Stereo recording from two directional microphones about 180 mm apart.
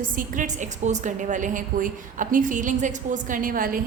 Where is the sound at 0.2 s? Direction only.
45° right (ahead or behind).